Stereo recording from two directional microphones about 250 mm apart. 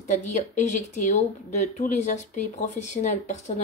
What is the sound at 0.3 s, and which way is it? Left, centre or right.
Speech, left.